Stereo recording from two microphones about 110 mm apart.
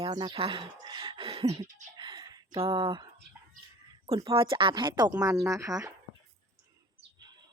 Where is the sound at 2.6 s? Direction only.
50° right (ahead or behind).